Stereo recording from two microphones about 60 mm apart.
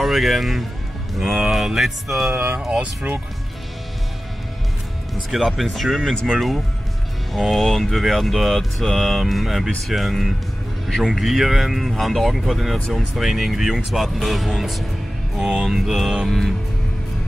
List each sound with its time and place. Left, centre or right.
0.0 s speech: centre
2.3 s speech: right
5.1 s speech: centre
7.3 s speech: centre